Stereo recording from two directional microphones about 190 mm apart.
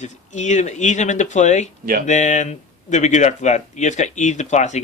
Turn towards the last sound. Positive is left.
turn(degrees=40)  # may be behind; listen again after turning